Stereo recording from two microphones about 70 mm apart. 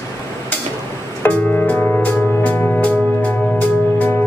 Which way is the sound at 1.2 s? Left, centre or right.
Left.